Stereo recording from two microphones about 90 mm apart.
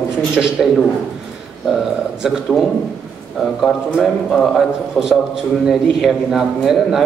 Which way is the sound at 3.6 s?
Centre (ahead or behind).